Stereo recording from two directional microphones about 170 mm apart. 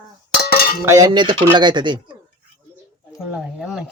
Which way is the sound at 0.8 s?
20° right (ahead or behind).